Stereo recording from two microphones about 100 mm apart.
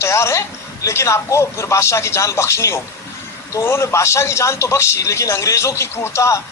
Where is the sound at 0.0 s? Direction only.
30° left (ahead or behind).